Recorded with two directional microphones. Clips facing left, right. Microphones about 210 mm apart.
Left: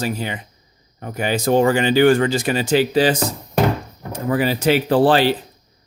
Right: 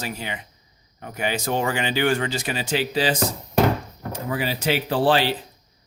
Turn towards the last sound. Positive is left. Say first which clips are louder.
# left 5 dB
turn(degrees=50)  # may be behind; listen again after turning